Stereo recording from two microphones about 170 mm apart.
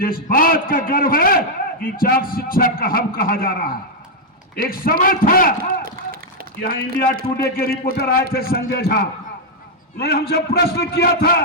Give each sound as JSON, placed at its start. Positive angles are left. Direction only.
{"t": 0.0, "sound": "a man's voice", "side_deg": 60}
{"t": 6.6, "sound": "a man's voice", "side_deg": 65}
{"t": 10.0, "sound": "a man's voice", "side_deg": 70}